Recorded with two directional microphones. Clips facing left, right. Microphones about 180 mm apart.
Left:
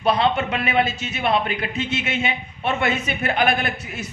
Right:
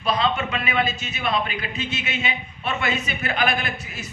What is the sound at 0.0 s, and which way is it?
A man's voice, 60° left (ahead or behind).